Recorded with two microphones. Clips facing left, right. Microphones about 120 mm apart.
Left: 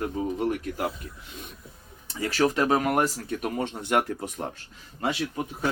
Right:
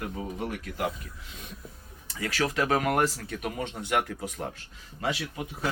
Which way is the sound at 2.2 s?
35° left (ahead or behind).